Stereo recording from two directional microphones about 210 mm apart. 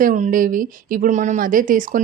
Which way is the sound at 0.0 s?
40° right (ahead or behind).